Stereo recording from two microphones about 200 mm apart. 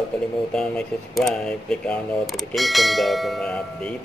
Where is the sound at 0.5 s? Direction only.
5° left (ahead or behind).